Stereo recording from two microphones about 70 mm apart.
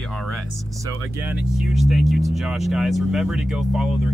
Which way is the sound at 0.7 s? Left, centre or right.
Right.